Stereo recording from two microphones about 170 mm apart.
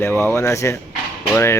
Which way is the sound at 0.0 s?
15° left (ahead or behind).